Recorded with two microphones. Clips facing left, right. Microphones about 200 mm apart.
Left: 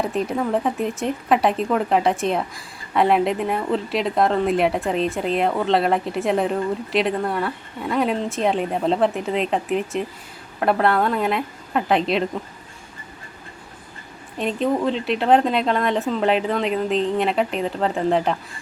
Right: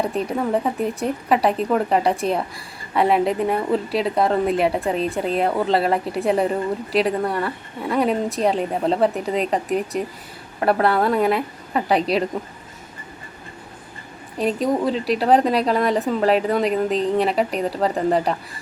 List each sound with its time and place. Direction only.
0.0 s a woman's voice: centre (ahead or behind)
14.3 s speech: 35° right (ahead or behind)
14.7 s a woman's voice: 5° right (ahead or behind)
16.9 s speech: 40° right (ahead or behind)
17.6 s a woman's voice: 5° right (ahead or behind)